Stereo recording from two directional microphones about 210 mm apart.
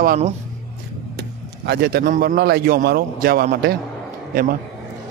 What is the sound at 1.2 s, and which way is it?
Speech, 50° right (ahead or behind).